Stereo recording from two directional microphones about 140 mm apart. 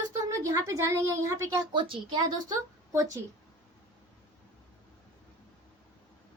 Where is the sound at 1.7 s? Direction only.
35° right (ahead or behind).